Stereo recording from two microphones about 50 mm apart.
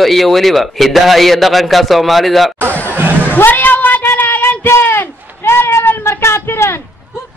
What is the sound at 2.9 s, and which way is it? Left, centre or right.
Music, right.